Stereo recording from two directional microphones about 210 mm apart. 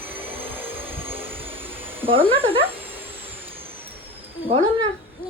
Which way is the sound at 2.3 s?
25° right (ahead or behind).